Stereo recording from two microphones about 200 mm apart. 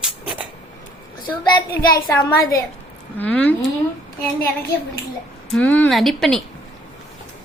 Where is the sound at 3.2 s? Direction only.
5° left (ahead or behind).